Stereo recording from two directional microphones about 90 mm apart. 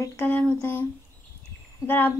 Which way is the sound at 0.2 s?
20° left (ahead or behind).